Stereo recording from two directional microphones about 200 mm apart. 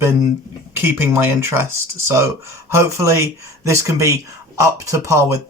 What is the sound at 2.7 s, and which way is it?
Speech, 15° right (ahead or behind).